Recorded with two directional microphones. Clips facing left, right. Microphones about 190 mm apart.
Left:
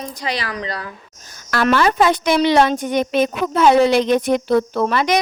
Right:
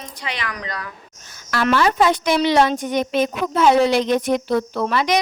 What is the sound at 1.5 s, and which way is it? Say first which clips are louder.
A woman's voice: left 2 dB; 50° left (ahead or behind).